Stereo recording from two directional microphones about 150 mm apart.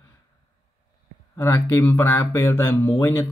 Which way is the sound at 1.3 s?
15° left (ahead or behind).